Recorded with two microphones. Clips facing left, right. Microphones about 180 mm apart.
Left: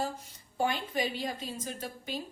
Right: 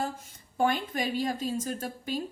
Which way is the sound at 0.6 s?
50° right (ahead or behind).